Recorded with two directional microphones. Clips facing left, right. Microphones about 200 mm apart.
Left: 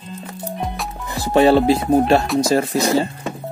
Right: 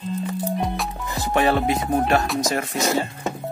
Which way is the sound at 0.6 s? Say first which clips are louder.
Right 1 dB; centre (ahead or behind).